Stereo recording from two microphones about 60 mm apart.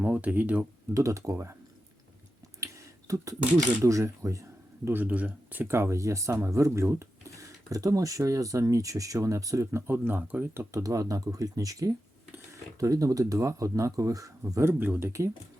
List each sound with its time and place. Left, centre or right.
0.0 s speech: right
0.9 s speech: right
2.6 s a sound: right
3.8 s speech: right
5.0 s speech: right
5.6 s speech: right
9.7 s speech: right
10.7 s speech: right